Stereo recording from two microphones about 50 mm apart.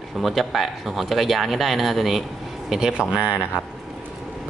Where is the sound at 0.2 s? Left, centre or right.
Centre.